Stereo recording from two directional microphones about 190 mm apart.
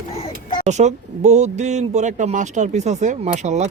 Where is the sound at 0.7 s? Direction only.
35° right (ahead or behind).